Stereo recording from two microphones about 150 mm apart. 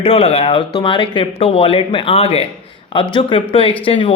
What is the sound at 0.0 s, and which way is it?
Speech, 40° left (ahead or behind).